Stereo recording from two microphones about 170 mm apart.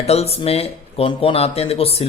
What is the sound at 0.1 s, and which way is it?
Speech, 35° left (ahead or behind).